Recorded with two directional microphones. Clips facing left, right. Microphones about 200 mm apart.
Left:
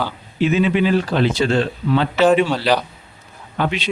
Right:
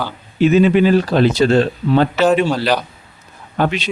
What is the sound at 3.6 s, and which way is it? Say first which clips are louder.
Speech: right 3 dB; 45° right (ahead or behind).